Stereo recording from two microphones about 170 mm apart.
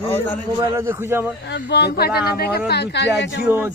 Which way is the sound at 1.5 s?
75° left (ahead or behind).